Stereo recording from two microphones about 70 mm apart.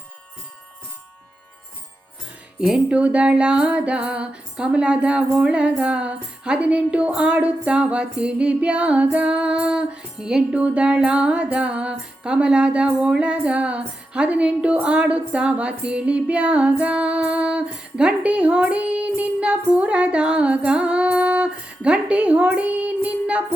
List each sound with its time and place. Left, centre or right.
2.6 s music: centre